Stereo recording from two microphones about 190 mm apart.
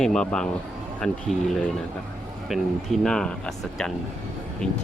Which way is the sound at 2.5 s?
Centre (ahead or behind).